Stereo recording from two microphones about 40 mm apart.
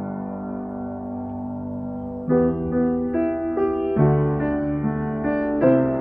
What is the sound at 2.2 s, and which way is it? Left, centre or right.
Music, centre.